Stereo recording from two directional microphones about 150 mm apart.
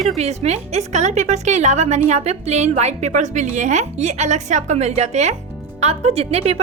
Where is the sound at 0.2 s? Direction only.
45° right (ahead or behind).